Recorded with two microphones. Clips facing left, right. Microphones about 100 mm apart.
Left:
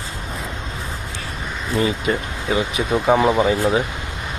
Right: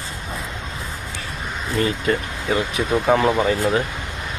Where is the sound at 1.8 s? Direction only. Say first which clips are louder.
Even; 15° left (ahead or behind).